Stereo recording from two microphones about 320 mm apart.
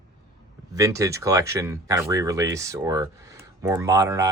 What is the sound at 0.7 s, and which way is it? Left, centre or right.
Speech, centre.